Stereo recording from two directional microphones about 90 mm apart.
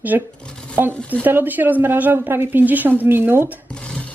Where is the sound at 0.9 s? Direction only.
15° left (ahead or behind).